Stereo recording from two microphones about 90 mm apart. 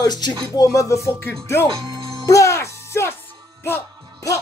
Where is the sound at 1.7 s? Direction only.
65° right (ahead or behind).